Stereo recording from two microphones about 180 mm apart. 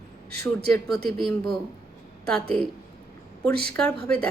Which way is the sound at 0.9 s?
60° right (ahead or behind).